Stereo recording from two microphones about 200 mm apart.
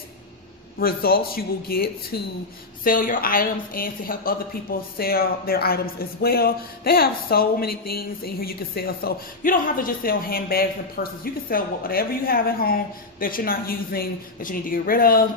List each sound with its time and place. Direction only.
0.8 s a woman's voice: 50° left (ahead or behind)
2.8 s a woman's voice: 45° left (ahead or behind)